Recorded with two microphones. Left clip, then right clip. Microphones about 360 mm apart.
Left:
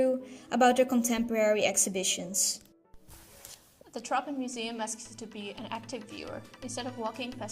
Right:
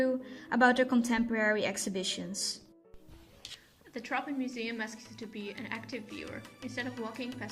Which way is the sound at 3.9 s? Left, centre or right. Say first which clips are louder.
Left 3 dB; centre.